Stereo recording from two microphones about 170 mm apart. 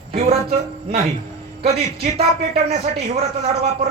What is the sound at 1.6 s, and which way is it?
A man's voice, 35° right (ahead or behind).